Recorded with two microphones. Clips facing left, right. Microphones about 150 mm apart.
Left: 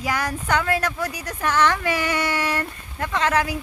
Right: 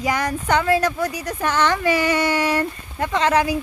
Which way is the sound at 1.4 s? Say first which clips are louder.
Even; 5° left (ahead or behind).